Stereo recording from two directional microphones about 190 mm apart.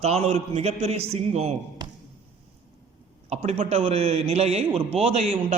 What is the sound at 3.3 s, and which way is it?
A man's voice, 35° right (ahead or behind).